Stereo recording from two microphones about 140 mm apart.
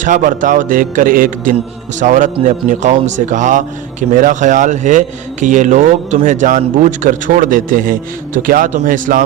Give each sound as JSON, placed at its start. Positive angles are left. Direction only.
{"t": 0.0, "sound": "a man's voice", "side_deg": -70}
{"t": 2.0, "sound": "a man's voice", "side_deg": -65}